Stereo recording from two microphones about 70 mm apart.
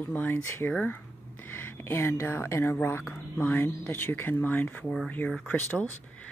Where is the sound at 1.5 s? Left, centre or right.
Left.